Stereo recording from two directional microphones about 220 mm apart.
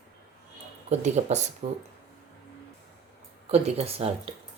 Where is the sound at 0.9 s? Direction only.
30° right (ahead or behind).